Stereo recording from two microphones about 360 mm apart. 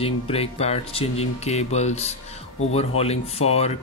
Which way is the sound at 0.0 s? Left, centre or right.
Centre.